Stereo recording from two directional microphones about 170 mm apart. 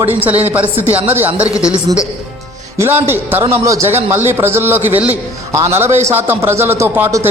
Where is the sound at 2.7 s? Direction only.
15° right (ahead or behind).